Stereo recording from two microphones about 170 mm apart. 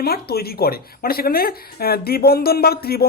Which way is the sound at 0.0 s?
65° left (ahead or behind).